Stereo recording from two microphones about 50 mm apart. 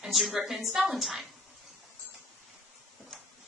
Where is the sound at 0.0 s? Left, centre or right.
Centre.